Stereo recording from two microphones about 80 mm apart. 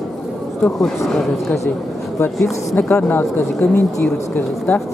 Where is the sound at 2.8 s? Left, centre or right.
Left.